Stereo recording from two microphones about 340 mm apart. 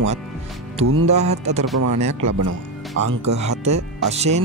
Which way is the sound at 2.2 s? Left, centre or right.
Right.